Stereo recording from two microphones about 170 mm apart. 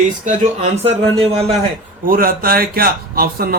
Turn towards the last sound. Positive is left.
turn(degrees=-60)  # may be behind; listen again after turning